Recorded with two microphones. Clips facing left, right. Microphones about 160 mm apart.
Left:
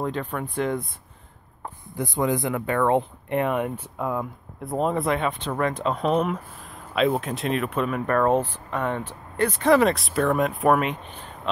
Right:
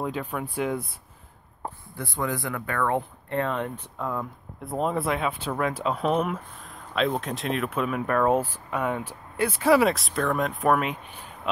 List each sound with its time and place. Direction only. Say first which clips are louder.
0.0 s speech: left 2 dB; 10° right (ahead or behind)
2.0 s speech: left 6 dB; 20° left (ahead or behind)
4.6 s speech: left 3 dB; centre (ahead or behind)